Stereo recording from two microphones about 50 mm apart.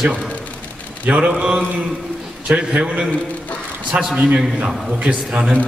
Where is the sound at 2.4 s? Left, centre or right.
Right.